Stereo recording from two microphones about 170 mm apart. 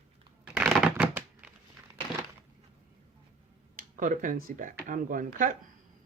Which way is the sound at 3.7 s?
50° right (ahead or behind).